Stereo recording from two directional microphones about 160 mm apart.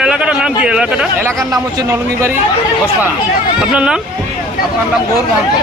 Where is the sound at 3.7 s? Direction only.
5° right (ahead or behind).